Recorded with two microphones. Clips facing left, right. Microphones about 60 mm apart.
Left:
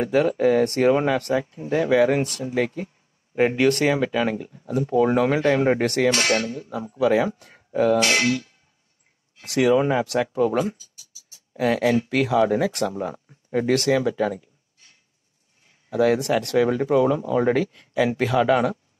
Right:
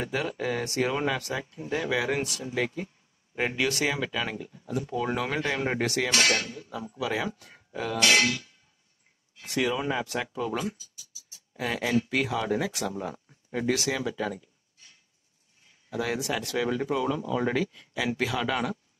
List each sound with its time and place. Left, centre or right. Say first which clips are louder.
0.0 s speech: left 11 dB; left
9.4 s speech: left 9 dB; left
15.9 s speech: left 10 dB; left